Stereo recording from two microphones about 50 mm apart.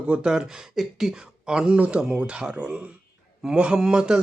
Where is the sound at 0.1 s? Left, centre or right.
Centre.